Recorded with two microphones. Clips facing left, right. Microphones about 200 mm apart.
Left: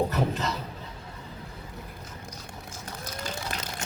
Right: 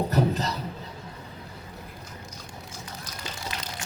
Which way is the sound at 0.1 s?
35° right (ahead or behind).